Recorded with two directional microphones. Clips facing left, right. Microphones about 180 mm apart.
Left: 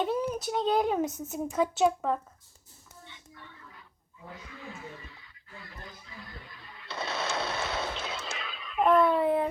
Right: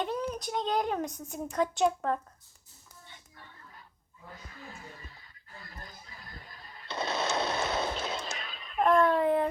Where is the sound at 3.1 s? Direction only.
40° right (ahead or behind).